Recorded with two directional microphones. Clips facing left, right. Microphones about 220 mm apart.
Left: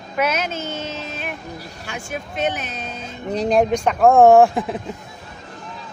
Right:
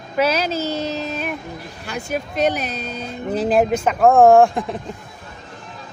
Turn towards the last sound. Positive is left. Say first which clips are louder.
# even
turn(degrees=0)  # may be behind; listen again after turning